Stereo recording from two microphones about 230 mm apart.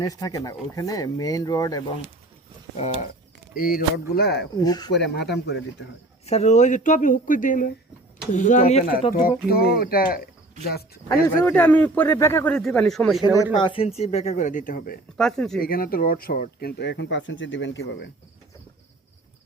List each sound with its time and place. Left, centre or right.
0.0 s speech: centre
3.5 s speech: left
4.5 s speech: centre
4.9 s speech: left
6.2 s speech: left
11.1 s speech: centre
13.2 s speech: centre; by 14.9 s left
15.2 s speech: centre
15.6 s speech: left